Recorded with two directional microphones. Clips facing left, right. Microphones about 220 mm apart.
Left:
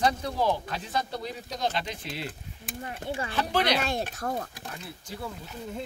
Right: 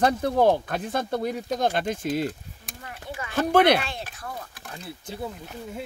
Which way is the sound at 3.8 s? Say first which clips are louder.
Left 5 dB; 45° left (ahead or behind).